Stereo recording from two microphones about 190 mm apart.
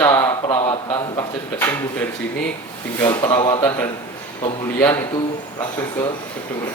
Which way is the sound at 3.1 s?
20° left (ahead or behind).